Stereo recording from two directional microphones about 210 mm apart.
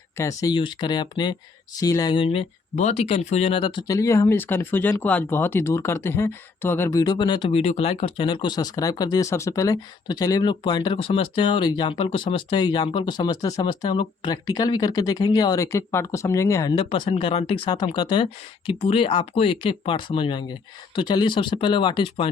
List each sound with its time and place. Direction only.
0.2 s speech: 15° left (ahead or behind)
16.8 s speech: 30° left (ahead or behind)